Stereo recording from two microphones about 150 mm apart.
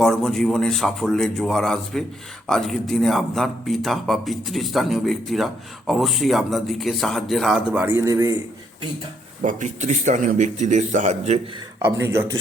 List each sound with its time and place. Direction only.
0.0 s speech: centre (ahead or behind)
7.7 s a man's voice: 10° right (ahead or behind)
9.4 s speech: 60° right (ahead or behind)
11.8 s a man's voice: 15° right (ahead or behind)